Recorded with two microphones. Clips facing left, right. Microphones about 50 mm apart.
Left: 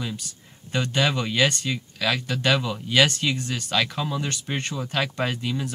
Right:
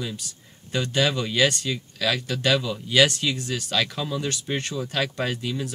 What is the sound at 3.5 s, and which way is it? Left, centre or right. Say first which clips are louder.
Speech: left 1 dB; centre.